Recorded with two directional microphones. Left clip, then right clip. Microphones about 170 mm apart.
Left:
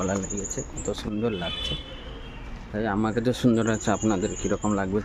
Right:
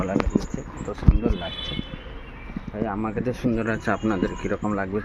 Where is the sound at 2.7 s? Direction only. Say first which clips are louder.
Left 2 dB; 30° left (ahead or behind).